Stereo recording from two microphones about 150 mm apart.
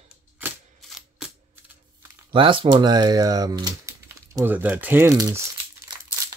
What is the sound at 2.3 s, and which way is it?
Speech, 35° right (ahead or behind).